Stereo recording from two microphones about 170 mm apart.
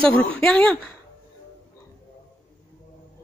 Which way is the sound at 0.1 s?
5° left (ahead or behind).